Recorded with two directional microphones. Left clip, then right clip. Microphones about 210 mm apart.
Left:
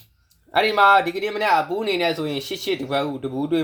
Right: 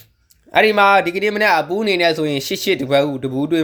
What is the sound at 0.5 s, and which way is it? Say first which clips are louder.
Speech: right 3 dB; 35° right (ahead or behind).